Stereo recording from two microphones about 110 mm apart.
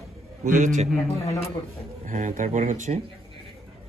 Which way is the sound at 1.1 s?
70° left (ahead or behind).